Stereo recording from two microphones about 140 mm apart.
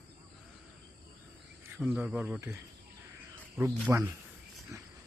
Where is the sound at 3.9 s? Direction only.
15° right (ahead or behind).